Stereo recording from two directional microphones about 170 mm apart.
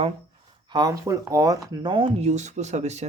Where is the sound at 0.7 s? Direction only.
20° right (ahead or behind).